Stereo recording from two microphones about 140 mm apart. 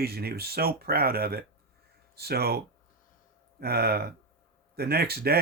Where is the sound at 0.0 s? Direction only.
90° right.